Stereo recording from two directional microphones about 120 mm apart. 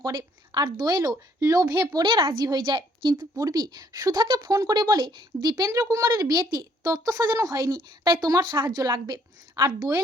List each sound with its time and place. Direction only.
0.0 s a woman's voice: 35° right (ahead or behind)
2.0 s a woman's voice: 45° right (ahead or behind)
2.4 s a woman's voice: 35° right (ahead or behind)